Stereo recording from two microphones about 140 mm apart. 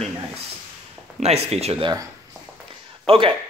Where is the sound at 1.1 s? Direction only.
50° right (ahead or behind).